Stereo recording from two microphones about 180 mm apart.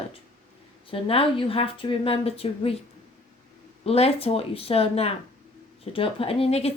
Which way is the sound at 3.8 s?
35° left (ahead or behind).